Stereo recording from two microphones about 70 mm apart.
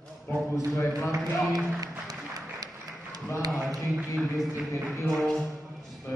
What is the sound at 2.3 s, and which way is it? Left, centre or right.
Applause, right.